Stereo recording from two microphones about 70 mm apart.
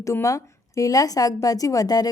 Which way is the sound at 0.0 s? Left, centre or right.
Left.